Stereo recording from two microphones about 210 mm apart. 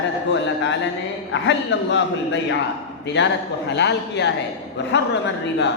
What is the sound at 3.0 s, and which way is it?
A man's voice, 55° left (ahead or behind).